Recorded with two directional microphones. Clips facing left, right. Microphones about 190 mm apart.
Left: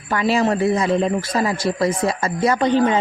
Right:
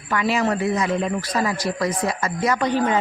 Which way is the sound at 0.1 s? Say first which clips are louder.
Left 3 dB; 30° left (ahead or behind).